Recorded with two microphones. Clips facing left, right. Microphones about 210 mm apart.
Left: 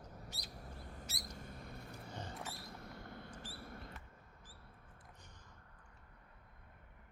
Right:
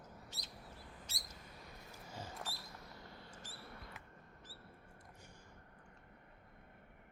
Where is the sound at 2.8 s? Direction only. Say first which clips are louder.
Left 4 dB; 55° left (ahead or behind).